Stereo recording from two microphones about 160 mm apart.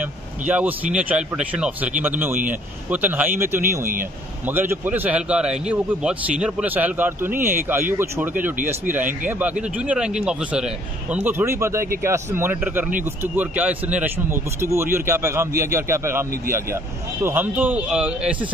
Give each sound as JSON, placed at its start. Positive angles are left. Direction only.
{"t": 0.0, "sound": "speech", "side_deg": -10}